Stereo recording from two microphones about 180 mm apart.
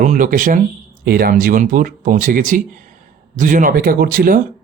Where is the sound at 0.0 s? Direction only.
45° right (ahead or behind).